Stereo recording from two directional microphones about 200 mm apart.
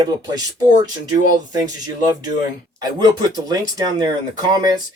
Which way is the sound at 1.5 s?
20° right (ahead or behind).